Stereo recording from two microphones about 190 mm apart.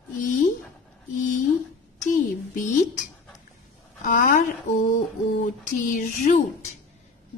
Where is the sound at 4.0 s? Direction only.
45° left (ahead or behind).